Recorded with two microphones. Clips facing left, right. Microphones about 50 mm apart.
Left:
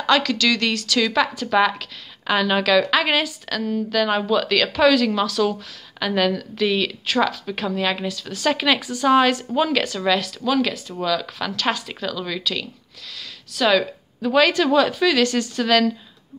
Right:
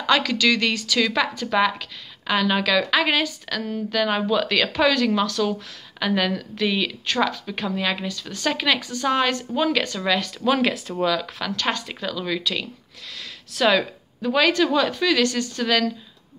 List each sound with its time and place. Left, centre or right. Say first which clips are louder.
0.0 s speech: left 1 dB; centre
8.7 s speech: left 4 dB; centre
9.5 s speech: left 2 dB; centre
10.3 s speech: even; centre
11.0 s speech: left 2 dB; centre
13.2 s a sound: even; centre
14.2 s speech: left 2 dB; centre
15.2 s a woman's voice: left 2 dB; left
15.6 s speech: left 3 dB; centre